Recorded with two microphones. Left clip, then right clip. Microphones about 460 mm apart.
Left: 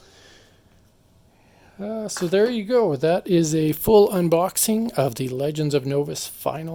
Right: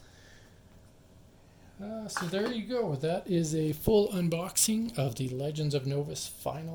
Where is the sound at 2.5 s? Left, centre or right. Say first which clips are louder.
Left 13 dB; centre.